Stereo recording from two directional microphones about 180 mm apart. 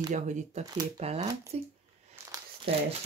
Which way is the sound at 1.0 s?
35° right (ahead or behind).